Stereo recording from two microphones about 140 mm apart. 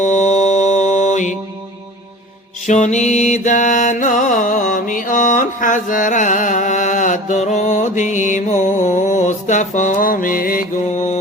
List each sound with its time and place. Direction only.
0.0 s mantra: 55° left (ahead or behind)
2.6 s music: 55° left (ahead or behind)